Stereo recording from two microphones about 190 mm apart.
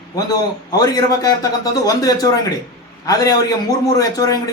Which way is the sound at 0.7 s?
20° left (ahead or behind).